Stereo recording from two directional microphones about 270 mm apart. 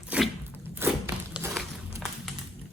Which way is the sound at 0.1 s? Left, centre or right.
Centre.